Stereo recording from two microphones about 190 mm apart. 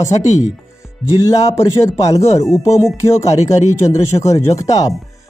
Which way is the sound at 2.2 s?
35° left (ahead or behind).